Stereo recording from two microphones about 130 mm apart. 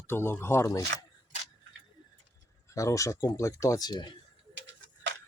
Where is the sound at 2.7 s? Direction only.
25° left (ahead or behind).